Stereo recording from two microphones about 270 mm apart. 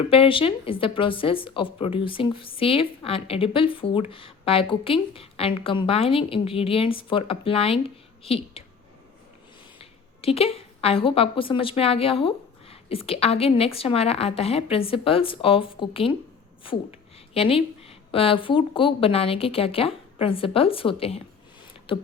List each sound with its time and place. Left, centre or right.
0.1 s a woman's voice: centre
9.7 s a woman's voice: left
17.3 s a woman's voice: left